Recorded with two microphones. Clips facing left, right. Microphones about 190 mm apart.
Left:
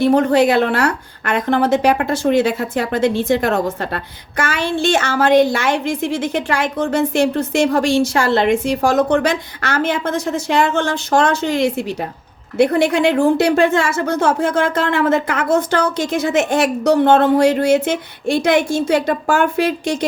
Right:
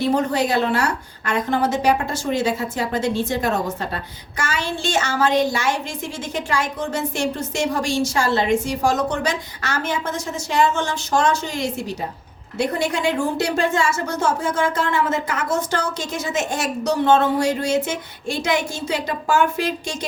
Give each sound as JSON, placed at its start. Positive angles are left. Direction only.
{"t": 0.0, "sound": "a woman's voice", "side_deg": 60}